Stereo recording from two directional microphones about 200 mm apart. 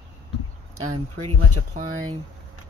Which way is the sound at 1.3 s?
30° right (ahead or behind).